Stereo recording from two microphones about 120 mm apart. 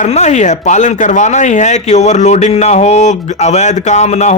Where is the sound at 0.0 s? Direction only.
75° left (ahead or behind).